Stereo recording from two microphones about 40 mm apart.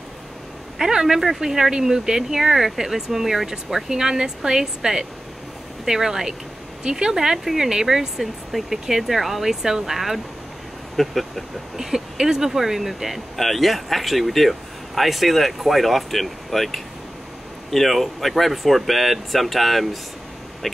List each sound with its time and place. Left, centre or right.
0.7 s speech: centre
11.7 s speech: centre